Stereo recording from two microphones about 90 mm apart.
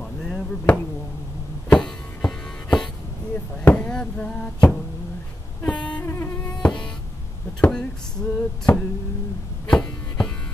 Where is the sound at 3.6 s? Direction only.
20° left (ahead or behind).